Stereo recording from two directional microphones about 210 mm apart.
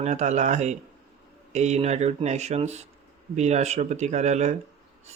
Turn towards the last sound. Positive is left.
turn(degrees=-30)  # may be behind; listen again after turning